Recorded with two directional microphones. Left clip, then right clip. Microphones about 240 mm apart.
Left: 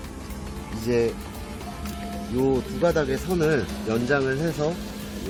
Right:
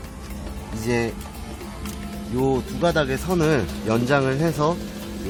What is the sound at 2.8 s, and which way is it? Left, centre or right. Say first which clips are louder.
Speech: right 2 dB; right.